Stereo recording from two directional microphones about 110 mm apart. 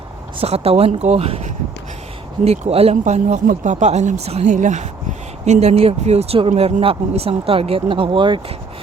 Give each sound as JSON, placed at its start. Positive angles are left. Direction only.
{"t": 0.3, "sound": "speech", "side_deg": -70}